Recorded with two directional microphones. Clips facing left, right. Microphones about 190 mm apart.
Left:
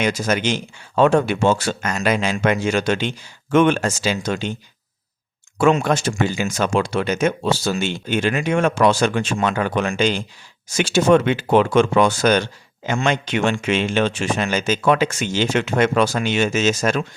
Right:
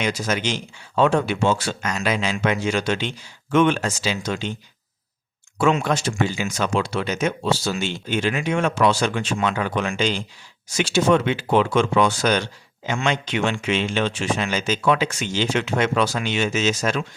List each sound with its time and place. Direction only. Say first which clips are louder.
0.0 s speech: left 4 dB; 50° left (ahead or behind)
5.5 s speech: left 3 dB; 50° left (ahead or behind)